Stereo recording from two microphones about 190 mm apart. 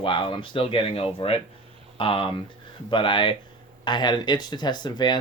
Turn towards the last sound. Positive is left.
turn(degrees=20)  # may be behind; listen again after turning